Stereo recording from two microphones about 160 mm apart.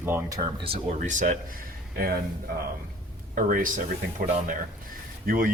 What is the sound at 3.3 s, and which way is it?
Speech, 60° right (ahead or behind).